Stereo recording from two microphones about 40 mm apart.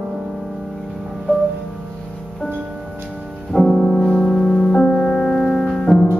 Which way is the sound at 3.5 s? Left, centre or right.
Centre.